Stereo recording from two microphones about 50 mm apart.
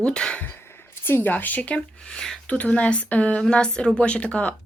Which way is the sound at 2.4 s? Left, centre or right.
Left.